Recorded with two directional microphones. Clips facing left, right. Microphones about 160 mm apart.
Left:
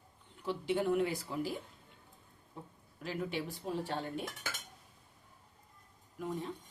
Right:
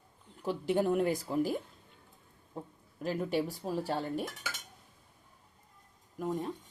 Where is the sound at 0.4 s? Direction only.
45° right (ahead or behind).